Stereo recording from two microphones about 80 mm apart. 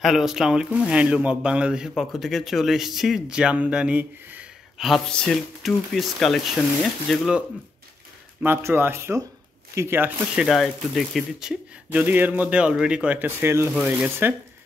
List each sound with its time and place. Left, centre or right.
0.0 s speech: centre
4.7 s speech: centre
5.1 s speech: centre
8.5 s speech: right
10.3 s speech: centre
11.9 s speech: right
13.4 s speech: right
13.8 s speech: centre